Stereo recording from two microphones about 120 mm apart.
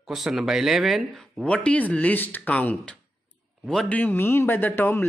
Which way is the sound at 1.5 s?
10° left (ahead or behind).